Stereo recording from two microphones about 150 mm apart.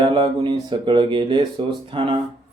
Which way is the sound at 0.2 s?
30° right (ahead or behind).